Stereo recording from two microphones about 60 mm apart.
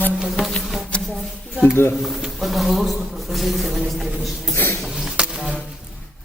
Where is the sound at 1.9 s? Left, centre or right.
Centre.